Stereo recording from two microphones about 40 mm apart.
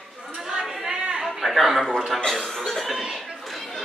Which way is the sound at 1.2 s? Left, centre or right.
Centre.